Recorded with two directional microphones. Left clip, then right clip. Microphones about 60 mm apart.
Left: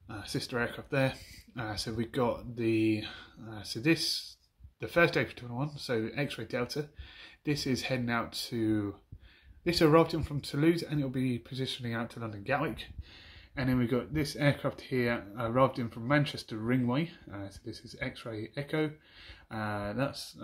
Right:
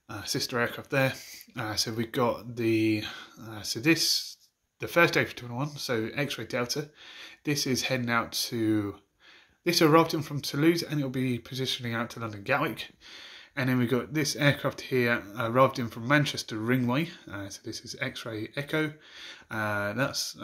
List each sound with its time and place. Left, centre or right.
0.1 s speech: right